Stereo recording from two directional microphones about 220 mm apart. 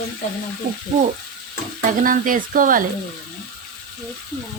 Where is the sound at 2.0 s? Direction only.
40° right (ahead or behind).